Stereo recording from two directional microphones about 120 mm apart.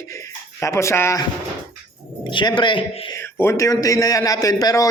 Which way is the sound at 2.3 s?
40° left (ahead or behind).